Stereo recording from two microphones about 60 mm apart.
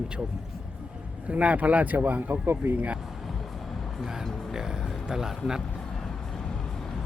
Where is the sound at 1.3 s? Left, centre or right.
Right.